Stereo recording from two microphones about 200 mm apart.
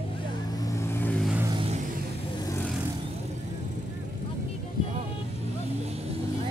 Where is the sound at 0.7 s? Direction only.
15° left (ahead or behind).